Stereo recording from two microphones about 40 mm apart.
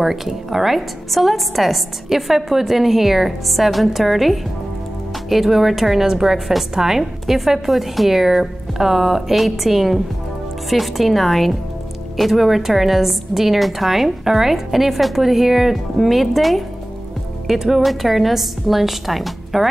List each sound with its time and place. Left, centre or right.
0.0 s a woman's voice: centre